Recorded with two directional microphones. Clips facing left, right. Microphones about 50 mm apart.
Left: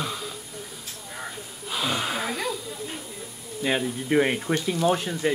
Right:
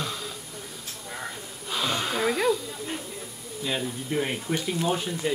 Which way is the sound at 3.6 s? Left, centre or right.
Left.